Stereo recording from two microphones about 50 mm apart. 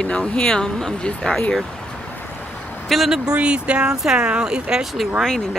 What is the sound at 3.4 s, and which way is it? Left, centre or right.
Speech, right.